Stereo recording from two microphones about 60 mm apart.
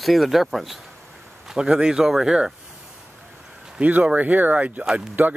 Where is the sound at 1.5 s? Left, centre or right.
Centre.